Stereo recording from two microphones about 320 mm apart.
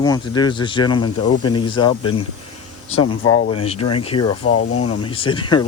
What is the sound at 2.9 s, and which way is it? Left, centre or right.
Speech, left.